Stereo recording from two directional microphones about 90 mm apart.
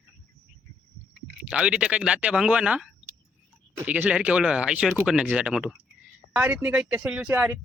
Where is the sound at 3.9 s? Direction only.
15° right (ahead or behind).